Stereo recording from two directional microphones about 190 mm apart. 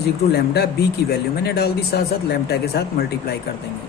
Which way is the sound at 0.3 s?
55° left (ahead or behind).